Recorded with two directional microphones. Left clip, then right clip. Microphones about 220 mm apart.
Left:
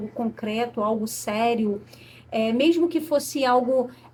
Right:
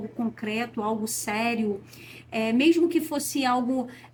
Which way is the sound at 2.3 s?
20° left (ahead or behind).